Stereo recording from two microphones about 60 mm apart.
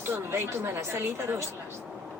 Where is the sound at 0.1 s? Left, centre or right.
Right.